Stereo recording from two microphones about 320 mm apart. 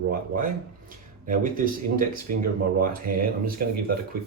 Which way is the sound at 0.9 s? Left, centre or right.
Right.